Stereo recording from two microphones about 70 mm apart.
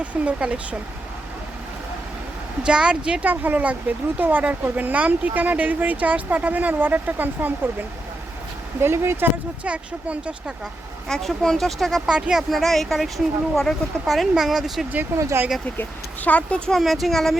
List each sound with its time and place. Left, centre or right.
0.0 s speech: centre
2.6 s speech: centre
8.8 s speech: right
9.6 s speech: centre
11.1 s speech: centre
12.0 s speech: centre
15.1 s speech: right
15.8 s speech: left
16.7 s speech: centre